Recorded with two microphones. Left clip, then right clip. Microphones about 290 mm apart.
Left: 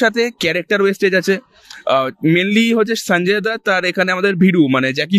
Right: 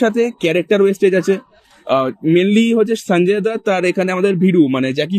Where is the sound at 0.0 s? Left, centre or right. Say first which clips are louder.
Even; left.